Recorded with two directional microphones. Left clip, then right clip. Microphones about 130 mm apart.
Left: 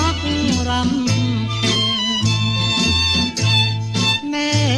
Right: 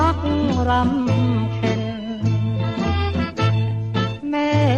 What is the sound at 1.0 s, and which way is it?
Music, 50° left (ahead or behind).